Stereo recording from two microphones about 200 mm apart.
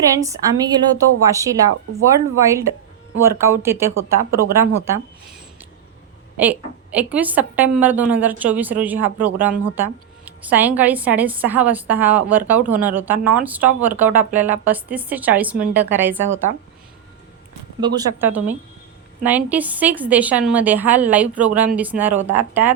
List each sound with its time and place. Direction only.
0.2 s a woman's voice: 20° right (ahead or behind)
6.4 s a woman's voice: 10° right (ahead or behind)
17.7 s a woman's voice: 20° right (ahead or behind)